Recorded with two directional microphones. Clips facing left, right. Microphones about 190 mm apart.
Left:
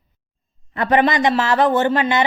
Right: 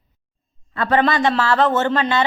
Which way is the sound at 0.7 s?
20° left (ahead or behind).